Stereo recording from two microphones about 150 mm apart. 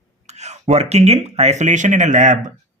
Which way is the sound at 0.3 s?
50° right (ahead or behind).